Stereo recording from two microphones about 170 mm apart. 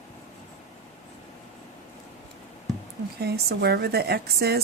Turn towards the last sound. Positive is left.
turn(degrees=-70)  # may be behind; listen again after turning